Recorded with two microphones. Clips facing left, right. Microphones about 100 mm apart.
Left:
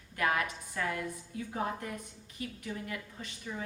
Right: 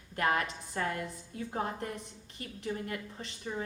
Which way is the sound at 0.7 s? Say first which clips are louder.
Right 2 dB; 40° right (ahead or behind).